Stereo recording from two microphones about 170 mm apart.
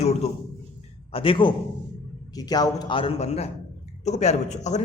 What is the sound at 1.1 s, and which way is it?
A man's voice, 30° left (ahead or behind).